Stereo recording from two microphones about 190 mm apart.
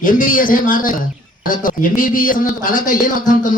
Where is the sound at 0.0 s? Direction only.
45° left (ahead or behind).